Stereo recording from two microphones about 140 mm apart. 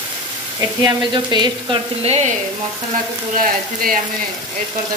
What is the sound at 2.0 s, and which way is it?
Frying, 50° right (ahead or behind).